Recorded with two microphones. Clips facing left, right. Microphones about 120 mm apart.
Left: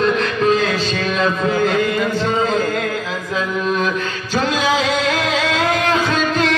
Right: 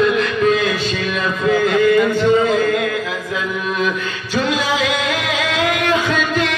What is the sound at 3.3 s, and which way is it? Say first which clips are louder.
Mantra: left 3 dB; 40° left (ahead or behind).